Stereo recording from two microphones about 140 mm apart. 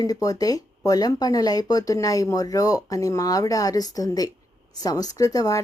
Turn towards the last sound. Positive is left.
turn(degrees=25)  # may be behind; listen again after turning